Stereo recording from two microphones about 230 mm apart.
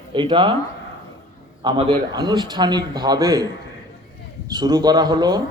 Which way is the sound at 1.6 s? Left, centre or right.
Right.